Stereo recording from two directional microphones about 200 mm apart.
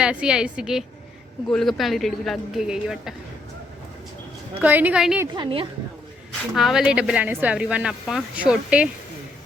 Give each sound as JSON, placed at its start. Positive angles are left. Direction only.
{"t": 0.0, "sound": "speech", "side_deg": -5}
{"t": 4.6, "sound": "a woman's voice", "side_deg": -10}
{"t": 5.2, "sound": "a woman's voice", "side_deg": -25}
{"t": 6.5, "sound": "speech", "side_deg": 0}